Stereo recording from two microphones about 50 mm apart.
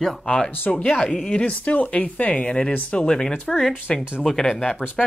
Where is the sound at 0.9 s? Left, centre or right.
Centre.